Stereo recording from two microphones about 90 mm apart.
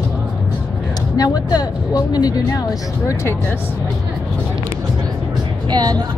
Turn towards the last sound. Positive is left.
turn(degrees=-50)  # may be behind; listen again after turning